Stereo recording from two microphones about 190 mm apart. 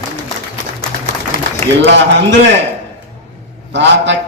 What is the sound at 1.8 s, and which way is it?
Speech, 70° right (ahead or behind).